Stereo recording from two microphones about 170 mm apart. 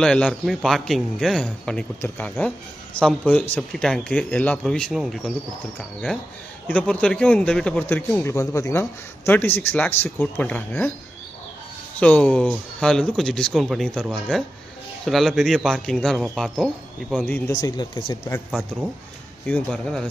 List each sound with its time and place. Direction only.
0.0 s a man's voice: 5° left (ahead or behind)
6.7 s speech: 5° left (ahead or behind)
12.0 s a man's voice: 5° left (ahead or behind)
15.0 s a man's voice: centre (ahead or behind)
17.5 s speech: 20° left (ahead or behind)
18.5 s a man's voice: 5° right (ahead or behind)